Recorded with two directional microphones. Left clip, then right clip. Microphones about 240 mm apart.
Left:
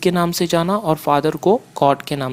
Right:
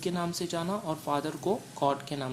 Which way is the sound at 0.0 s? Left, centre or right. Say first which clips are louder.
Left 15 dB; left.